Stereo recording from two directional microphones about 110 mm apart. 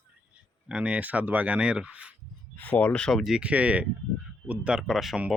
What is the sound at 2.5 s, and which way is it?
Speech, 15° left (ahead or behind).